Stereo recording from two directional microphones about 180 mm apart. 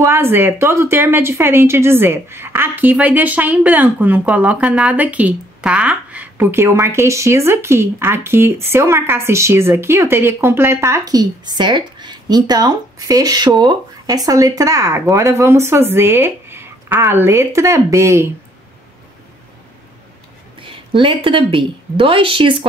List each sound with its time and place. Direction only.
0.0 s speech: 10° right (ahead or behind)
20.6 s a woman's voice: 30° right (ahead or behind)